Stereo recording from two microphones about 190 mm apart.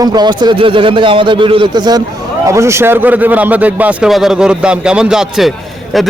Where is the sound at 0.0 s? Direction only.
20° right (ahead or behind).